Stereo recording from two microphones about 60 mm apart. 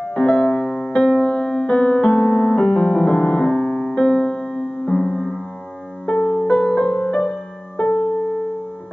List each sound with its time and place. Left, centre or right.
0.1 s music: centre
6.0 s music: left
6.5 s music: centre
7.1 s music: centre
7.8 s music: left